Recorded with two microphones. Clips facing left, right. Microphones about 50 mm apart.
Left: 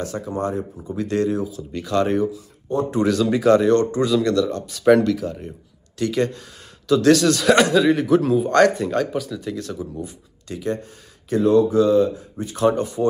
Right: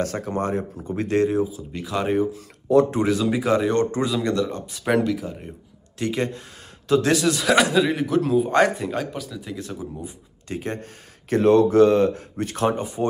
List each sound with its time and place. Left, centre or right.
0.0 s speech: right
1.0 s speech: right
7.1 s speech: centre
8.5 s speech: centre
10.5 s speech: right
12.7 s speech: centre